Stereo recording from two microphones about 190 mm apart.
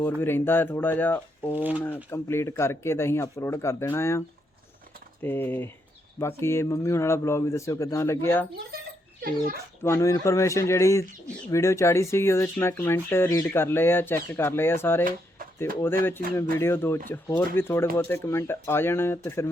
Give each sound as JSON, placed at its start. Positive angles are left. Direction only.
{"t": 0.0, "sound": "speech", "side_deg": 10}
{"t": 1.5, "sound": "speech", "side_deg": -10}
{"t": 2.0, "sound": "speech", "side_deg": 15}
{"t": 5.2, "sound": "speech", "side_deg": 10}
{"t": 9.8, "sound": "speech", "side_deg": 15}
{"t": 16.3, "sound": "speech", "side_deg": 15}